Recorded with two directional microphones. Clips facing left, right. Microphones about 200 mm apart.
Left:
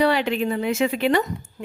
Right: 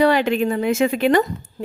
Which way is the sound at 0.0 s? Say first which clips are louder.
Right 4 dB; 45° right (ahead or behind).